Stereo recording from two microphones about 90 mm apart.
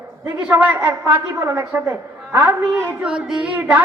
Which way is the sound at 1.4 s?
30° right (ahead or behind).